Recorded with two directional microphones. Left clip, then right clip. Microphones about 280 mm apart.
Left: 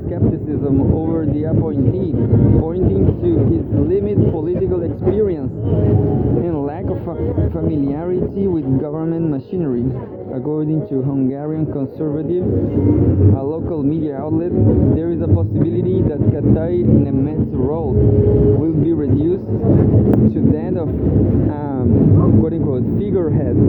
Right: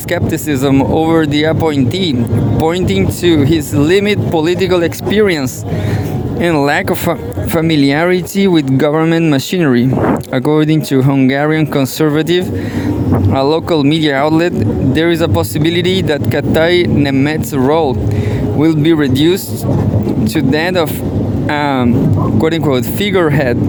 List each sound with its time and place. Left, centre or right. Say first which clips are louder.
0.6 s speech: right 7 dB; right
7.5 s speech: right 9 dB; right
22.4 s speech: right 6 dB; right